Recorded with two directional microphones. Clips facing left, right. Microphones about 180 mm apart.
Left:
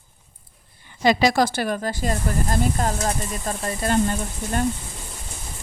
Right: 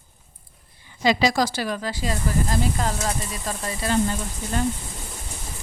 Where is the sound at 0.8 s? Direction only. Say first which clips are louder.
Left 2 dB; 55° left (ahead or behind).